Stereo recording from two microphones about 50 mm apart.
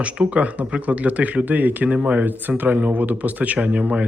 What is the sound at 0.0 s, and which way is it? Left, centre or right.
Speech, right.